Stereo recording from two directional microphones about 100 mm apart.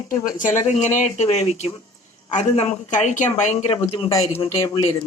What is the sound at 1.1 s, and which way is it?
Speech, 90° left.